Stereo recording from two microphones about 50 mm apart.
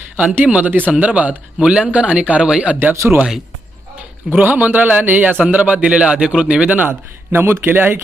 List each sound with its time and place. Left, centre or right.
0.4 s a man's voice: right
2.9 s speech: right
4.3 s a man's voice: right
7.3 s speech: right